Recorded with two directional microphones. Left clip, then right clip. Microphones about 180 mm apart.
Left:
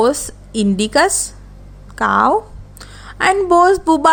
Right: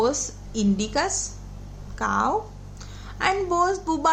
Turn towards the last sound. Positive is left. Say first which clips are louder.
# left 11 dB
turn(degrees=50)  # may be behind; listen again after turning